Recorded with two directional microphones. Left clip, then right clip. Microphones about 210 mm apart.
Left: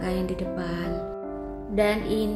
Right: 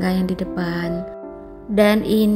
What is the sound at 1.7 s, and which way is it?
Music, 50° right (ahead or behind).